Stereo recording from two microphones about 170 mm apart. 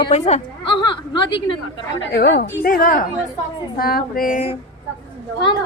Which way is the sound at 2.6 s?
55° left (ahead or behind).